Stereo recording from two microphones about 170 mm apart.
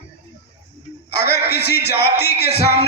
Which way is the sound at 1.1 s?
70° left (ahead or behind).